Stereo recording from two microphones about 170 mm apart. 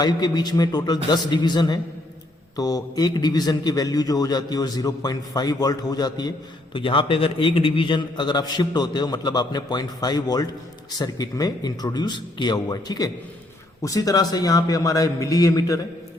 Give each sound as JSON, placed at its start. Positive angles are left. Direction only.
{"t": 0.0, "sound": "a man's voice", "side_deg": 25}